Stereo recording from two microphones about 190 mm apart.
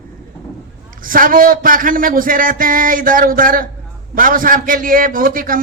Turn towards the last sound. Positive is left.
turn(degrees=-45)  # may be behind; listen again after turning